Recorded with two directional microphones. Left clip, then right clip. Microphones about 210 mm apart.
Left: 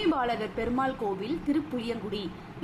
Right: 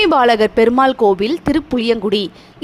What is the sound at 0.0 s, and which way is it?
A woman's voice, 50° right (ahead or behind).